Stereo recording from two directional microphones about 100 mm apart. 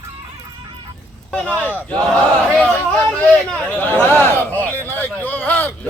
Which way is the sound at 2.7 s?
5° left (ahead or behind).